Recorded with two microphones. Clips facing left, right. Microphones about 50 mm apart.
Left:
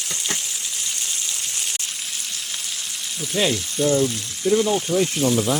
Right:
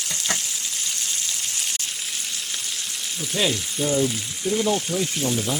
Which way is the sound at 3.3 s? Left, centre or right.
Centre.